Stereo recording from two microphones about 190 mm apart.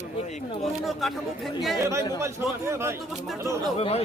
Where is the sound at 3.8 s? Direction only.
30° left (ahead or behind).